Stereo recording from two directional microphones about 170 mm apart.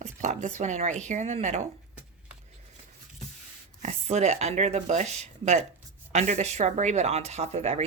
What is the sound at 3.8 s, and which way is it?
Speech, 40° right (ahead or behind).